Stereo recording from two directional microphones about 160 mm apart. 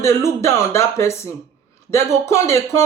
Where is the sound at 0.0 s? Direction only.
15° left (ahead or behind).